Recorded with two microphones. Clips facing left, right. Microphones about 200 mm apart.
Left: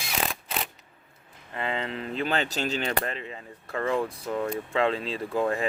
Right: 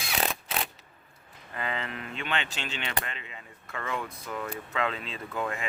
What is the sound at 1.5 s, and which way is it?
Speech, 30° left (ahead or behind).